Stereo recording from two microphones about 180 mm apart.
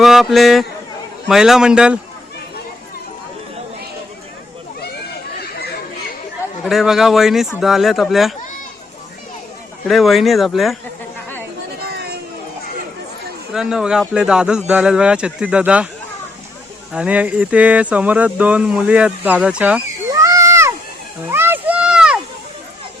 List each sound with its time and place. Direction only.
0.0 s a man's voice: centre (ahead or behind)
5.4 s chatter: 60° left (ahead or behind)
6.7 s speech: centre (ahead or behind)
9.8 s speech: centre (ahead or behind)
13.5 s speech: 5° right (ahead or behind)
16.9 s speech: 5° right (ahead or behind)
21.2 s a sound: 10° right (ahead or behind)